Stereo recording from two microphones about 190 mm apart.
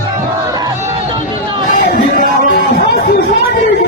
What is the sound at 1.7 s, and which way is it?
Music, 45° left (ahead or behind).